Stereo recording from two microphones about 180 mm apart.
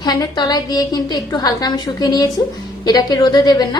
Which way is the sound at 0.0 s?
20° left (ahead or behind).